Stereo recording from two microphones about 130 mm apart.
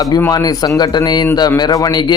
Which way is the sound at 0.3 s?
30° left (ahead or behind).